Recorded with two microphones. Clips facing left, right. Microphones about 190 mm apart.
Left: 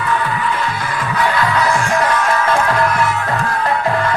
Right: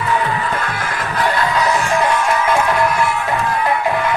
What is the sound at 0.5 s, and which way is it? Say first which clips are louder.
Music: left 1 dB; 55° right (ahead or behind).